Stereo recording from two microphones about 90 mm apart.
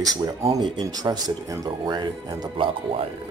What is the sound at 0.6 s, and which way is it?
Speech, 50° right (ahead or behind).